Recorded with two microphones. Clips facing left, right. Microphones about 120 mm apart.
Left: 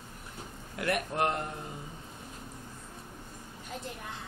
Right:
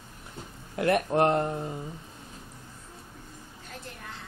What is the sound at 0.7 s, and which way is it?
Speech, 30° right (ahead or behind).